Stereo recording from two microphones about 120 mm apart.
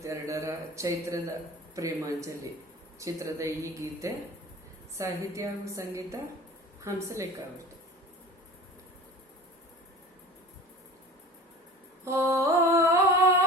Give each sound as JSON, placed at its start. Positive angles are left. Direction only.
{"t": 0.0, "sound": "a man's voice", "side_deg": -25}
{"t": 12.0, "sound": "mantra", "side_deg": -25}